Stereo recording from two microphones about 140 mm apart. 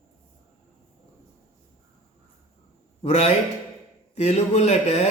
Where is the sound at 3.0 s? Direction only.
50° left (ahead or behind).